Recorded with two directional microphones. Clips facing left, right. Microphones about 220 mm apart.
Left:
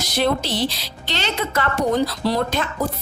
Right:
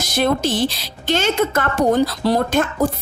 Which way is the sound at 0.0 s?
50° right (ahead or behind).